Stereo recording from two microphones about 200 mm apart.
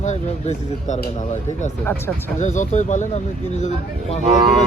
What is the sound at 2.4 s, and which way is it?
Speech, 35° left (ahead or behind).